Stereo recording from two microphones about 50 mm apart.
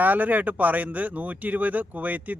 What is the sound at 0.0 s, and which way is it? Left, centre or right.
Speech, right.